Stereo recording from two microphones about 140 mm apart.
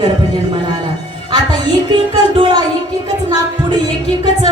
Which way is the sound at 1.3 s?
30° right (ahead or behind).